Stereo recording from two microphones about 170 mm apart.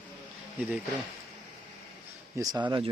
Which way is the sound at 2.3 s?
25° right (ahead or behind).